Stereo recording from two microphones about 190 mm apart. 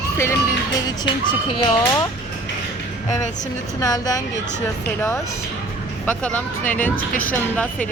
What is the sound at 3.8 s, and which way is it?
Speech, 20° left (ahead or behind).